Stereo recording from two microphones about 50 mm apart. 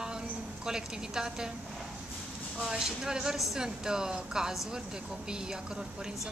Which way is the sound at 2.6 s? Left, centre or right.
Centre.